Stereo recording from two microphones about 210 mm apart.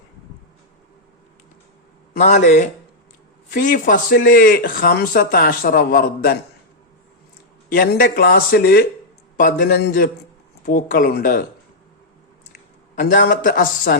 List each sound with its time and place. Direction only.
2.1 s a man's voice: 35° left (ahead or behind)
7.7 s speech: 40° left (ahead or behind)
13.0 s a man's voice: 40° left (ahead or behind)